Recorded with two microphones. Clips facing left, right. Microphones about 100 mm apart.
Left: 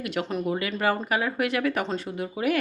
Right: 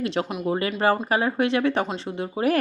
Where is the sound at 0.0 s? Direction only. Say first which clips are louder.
Right 2 dB; 30° right (ahead or behind).